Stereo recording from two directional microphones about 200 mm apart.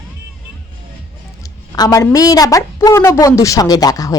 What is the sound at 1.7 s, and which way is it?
A woman's voice, 20° left (ahead or behind).